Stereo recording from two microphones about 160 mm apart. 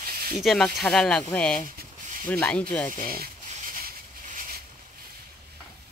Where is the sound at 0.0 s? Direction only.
70° right (ahead or behind).